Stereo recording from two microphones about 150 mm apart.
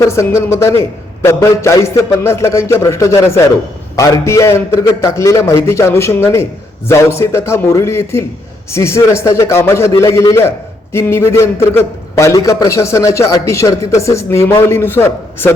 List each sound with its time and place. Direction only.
0.0 s a man's voice: 20° left (ahead or behind)